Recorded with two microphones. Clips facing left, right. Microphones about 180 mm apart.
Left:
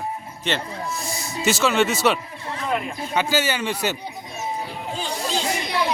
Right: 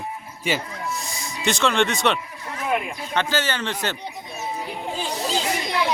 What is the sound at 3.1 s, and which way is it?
Speech, 10° left (ahead or behind).